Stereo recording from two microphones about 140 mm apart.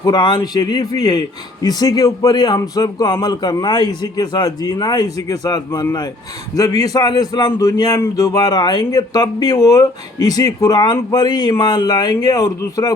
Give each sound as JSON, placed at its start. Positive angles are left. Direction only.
{"t": 0.0, "sound": "a man's voice", "side_deg": 30}